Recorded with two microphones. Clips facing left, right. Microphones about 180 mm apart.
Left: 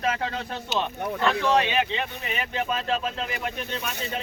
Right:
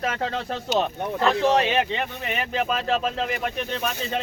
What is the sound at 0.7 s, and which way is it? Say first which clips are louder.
Speech: right 3 dB; 35° right (ahead or behind).